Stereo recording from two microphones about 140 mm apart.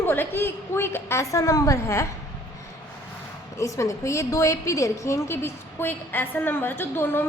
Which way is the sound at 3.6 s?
20° left (ahead or behind).